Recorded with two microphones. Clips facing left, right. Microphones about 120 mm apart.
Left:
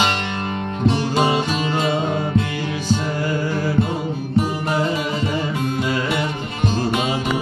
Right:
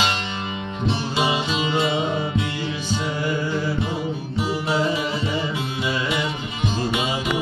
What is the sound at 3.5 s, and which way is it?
Music, 50° left (ahead or behind).